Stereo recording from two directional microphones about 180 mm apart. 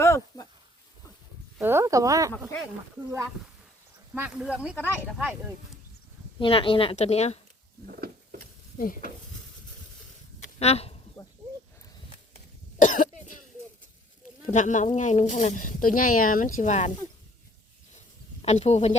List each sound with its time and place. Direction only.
0.0 s a sound: 15° left (ahead or behind)
1.5 s speech: 10° right (ahead or behind)
4.1 s speech: 5° right (ahead or behind)
6.4 s speech: 30° left (ahead or behind)
7.9 s a sound: 55° right (ahead or behind)
10.4 s a sound: 35° left (ahead or behind)
12.8 s cough: 45° left (ahead or behind)
14.4 s speech: 45° left (ahead or behind)
18.4 s speech: 40° left (ahead or behind)